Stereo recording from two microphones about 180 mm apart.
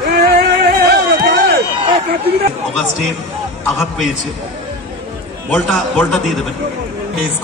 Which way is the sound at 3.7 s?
Centre (ahead or behind).